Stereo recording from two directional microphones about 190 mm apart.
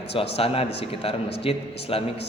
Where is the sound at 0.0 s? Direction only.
30° left (ahead or behind).